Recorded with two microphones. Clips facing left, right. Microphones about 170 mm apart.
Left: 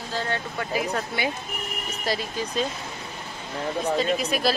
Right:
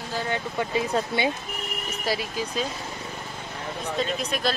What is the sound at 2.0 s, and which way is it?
Speech, 5° right (ahead or behind).